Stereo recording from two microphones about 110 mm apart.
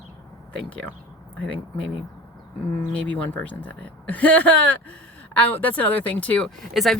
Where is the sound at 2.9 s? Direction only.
10° left (ahead or behind).